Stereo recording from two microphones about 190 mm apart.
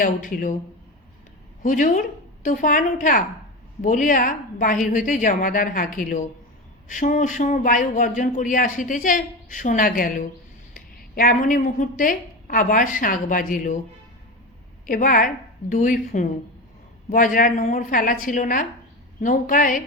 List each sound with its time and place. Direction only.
0.0 s speech: 45° left (ahead or behind)
1.6 s speech: 40° left (ahead or behind)
14.8 s a woman's voice: 45° left (ahead or behind)